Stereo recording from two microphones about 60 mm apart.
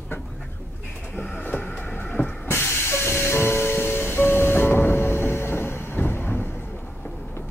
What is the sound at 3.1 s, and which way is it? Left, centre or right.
Music, left.